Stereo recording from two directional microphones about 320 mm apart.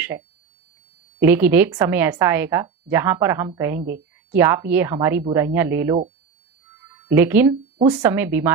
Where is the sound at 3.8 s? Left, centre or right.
Right.